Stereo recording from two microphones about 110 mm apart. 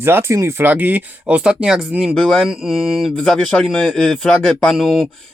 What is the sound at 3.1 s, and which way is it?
Speech, 5° left (ahead or behind).